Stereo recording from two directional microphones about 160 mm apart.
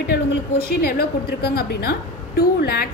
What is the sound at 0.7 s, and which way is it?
A woman's voice, 75° left (ahead or behind).